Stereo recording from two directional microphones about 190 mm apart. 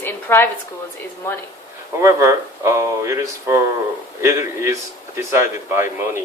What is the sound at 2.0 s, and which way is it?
Speech, 15° right (ahead or behind).